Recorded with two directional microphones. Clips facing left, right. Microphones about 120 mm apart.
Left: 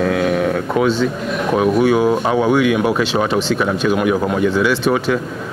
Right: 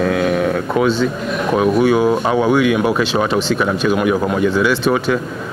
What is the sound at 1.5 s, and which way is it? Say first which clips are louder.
Speech: even; 20° right (ahead or behind).